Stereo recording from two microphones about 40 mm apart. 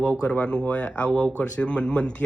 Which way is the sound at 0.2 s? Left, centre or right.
Left.